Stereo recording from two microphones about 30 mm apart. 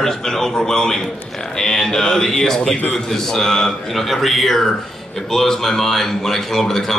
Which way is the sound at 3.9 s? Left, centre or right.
Centre.